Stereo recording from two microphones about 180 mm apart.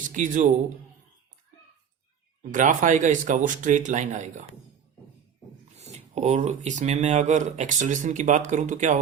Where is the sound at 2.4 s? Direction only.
45° right (ahead or behind).